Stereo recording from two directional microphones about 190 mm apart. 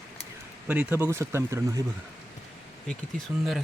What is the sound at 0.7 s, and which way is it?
Speech, 10° right (ahead or behind).